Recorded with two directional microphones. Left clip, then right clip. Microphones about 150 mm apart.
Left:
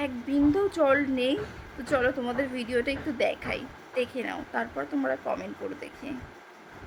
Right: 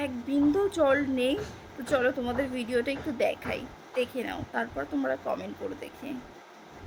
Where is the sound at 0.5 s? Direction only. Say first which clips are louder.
Left 1 dB; 10° right (ahead or behind).